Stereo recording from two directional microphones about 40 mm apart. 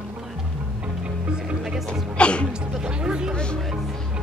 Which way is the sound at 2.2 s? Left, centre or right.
Left.